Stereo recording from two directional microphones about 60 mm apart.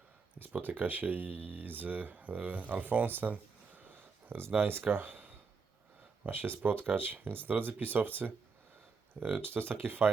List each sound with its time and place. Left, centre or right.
0.3 s speech: right
3.1 s a sound: right
6.2 s speech: right